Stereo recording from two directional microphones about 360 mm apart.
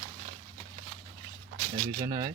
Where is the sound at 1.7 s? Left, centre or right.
Centre.